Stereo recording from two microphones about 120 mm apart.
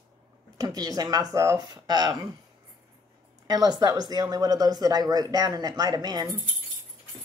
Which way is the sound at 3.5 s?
35° right (ahead or behind).